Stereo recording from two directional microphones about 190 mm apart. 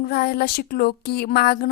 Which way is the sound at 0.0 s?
55° left (ahead or behind).